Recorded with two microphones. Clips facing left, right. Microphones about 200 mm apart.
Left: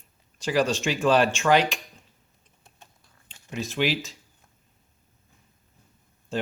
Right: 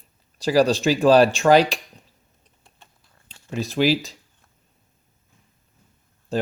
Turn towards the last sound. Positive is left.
turn(degrees=-35)  # may be behind; listen again after turning